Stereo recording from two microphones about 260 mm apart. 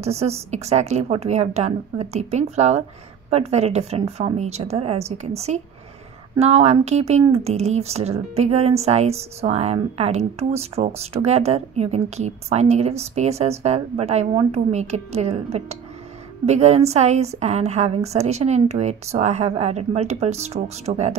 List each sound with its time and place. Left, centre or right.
0.0 s speech: right